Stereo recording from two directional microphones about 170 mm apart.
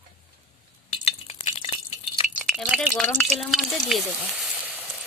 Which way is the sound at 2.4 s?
Centre (ahead or behind).